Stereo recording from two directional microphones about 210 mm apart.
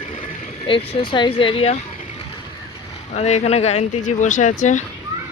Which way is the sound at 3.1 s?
30° left (ahead or behind).